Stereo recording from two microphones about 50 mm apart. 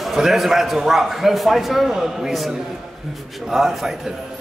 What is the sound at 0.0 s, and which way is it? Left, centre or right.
Speech, centre.